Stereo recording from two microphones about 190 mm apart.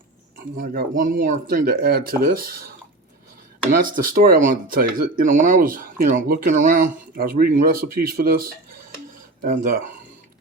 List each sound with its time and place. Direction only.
0.6 s speech: 50° right (ahead or behind)
3.7 s speech: 45° right (ahead or behind)